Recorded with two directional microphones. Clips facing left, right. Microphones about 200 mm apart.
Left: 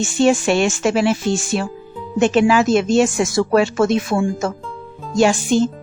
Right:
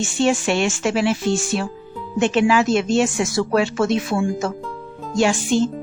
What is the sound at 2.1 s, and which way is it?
Speech, 40° left (ahead or behind).